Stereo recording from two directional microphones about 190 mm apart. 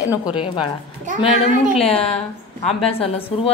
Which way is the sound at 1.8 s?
30° left (ahead or behind).